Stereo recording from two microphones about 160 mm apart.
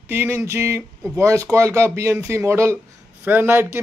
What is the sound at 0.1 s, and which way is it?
Speech, 15° right (ahead or behind).